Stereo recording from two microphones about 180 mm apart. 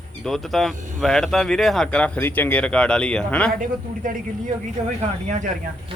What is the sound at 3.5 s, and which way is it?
Speech, 50° right (ahead or behind).